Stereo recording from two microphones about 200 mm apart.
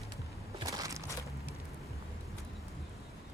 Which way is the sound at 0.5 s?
20° right (ahead or behind).